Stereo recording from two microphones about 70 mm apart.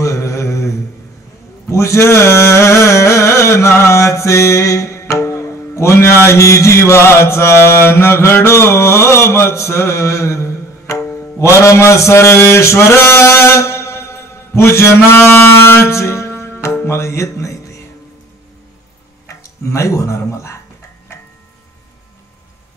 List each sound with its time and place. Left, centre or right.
0.0 s mantra: left
1.7 s music: left
11.3 s mantra: left
16.6 s speech: left
19.2 s speech: left